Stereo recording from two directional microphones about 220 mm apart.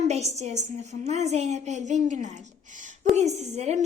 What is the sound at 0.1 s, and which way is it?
A woman's voice, 30° right (ahead or behind).